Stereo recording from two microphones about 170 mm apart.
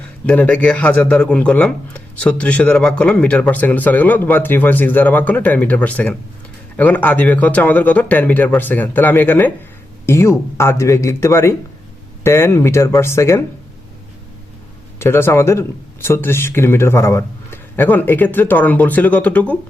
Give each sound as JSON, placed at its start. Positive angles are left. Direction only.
{"t": 0.3, "sound": "speech", "side_deg": 10}
{"t": 14.9, "sound": "speech", "side_deg": 15}